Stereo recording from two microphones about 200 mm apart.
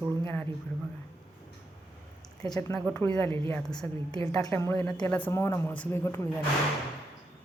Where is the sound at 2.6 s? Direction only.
10° left (ahead or behind).